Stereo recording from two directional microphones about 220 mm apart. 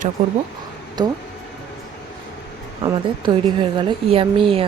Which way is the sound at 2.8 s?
20° right (ahead or behind).